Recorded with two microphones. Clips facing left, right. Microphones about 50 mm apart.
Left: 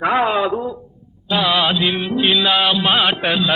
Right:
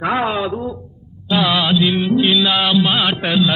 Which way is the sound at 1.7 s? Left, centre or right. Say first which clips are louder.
Right 4 dB; centre.